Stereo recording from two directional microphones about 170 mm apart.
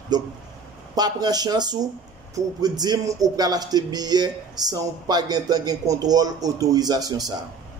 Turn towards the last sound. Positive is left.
turn(degrees=-20)  # may be behind; listen again after turning